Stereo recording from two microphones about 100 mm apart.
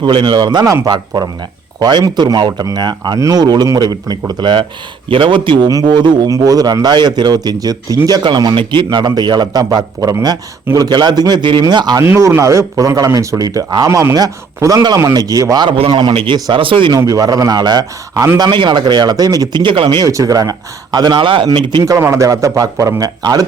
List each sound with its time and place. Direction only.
0.0 s a man's voice: 55° right (ahead or behind)
5.6 s a man's voice: 45° right (ahead or behind)
12.0 s a man's voice: 25° right (ahead or behind); by 16.1 s 45° right (ahead or behind)
16.1 s speech: 55° right (ahead or behind)
17.1 s speech: 35° right (ahead or behind)
18.3 s a man's voice: 50° right (ahead or behind)
19.6 s speech: 60° right (ahead or behind)
20.0 s a man's voice: 35° right (ahead or behind); by 21.8 s 50° right (ahead or behind)
21.8 s speech: 25° right (ahead or behind)